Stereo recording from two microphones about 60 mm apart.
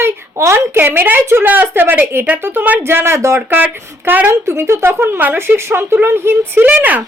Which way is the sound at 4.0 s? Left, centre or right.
Right.